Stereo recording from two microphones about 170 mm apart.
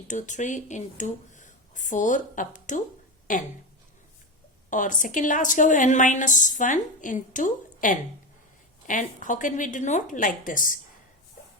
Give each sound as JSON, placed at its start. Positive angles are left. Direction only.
{"t": 0.1, "sound": "a woman's voice", "side_deg": 45}
{"t": 4.7, "sound": "a woman's voice", "side_deg": 50}